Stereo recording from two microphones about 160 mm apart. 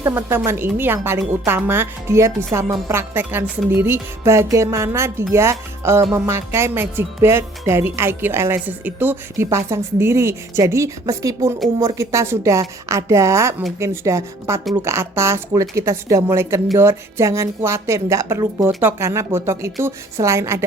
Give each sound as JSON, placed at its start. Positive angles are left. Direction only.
{"t": 0.0, "sound": "a woman's voice", "side_deg": -15}